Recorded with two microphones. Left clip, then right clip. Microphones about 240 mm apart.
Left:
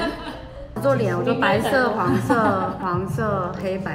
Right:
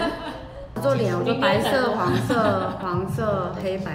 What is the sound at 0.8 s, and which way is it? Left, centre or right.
A woman's voice, centre.